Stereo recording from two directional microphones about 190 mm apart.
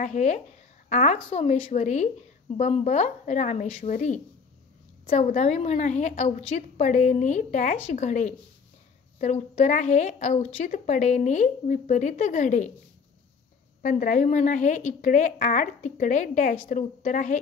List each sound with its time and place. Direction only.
0.0 s a woman's voice: 40° left (ahead or behind)
13.8 s a woman's voice: 40° left (ahead or behind)